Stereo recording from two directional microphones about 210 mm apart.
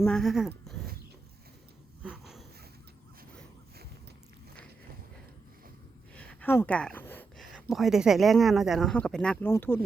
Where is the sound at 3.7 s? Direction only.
50° right (ahead or behind).